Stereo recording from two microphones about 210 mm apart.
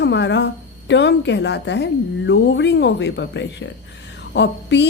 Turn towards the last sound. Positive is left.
turn(degrees=55)  # may be behind; listen again after turning